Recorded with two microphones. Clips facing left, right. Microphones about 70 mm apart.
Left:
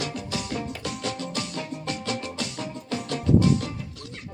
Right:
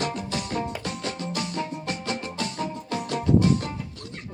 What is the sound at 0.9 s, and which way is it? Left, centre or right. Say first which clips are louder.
Music: even; right.